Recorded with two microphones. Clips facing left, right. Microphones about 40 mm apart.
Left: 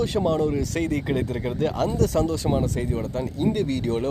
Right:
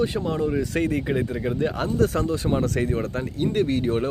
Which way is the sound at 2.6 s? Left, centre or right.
Right.